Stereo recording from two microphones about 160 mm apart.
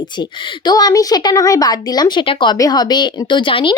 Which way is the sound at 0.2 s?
25° left (ahead or behind).